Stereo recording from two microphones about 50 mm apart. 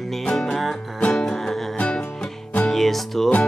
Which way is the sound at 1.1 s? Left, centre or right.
Centre.